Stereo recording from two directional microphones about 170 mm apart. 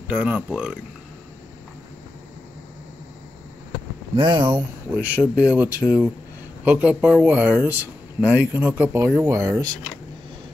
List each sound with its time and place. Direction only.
0.1 s speech: 10° right (ahead or behind)
4.2 s speech: 25° right (ahead or behind)
4.9 s speech: 10° right (ahead or behind)